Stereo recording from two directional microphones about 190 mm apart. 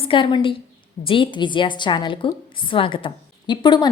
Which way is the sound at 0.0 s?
25° left (ahead or behind).